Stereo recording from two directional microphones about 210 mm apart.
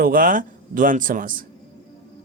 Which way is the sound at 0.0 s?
40° right (ahead or behind).